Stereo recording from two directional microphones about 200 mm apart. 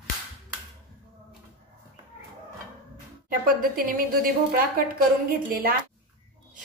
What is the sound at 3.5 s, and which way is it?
A woman's voice, 45° right (ahead or behind).